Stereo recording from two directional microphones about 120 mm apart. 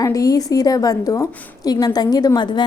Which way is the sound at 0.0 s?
30° left (ahead or behind).